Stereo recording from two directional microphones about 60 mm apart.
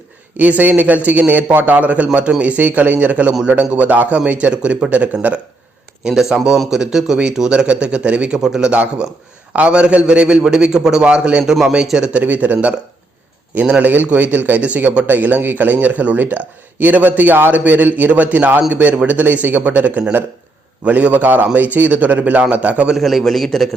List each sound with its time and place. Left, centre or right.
0.3 s speech: right
6.1 s a man's voice: centre
8.7 s speech: right
12.2 s speech: right
13.8 s speech: right
23.0 s a man's voice: centre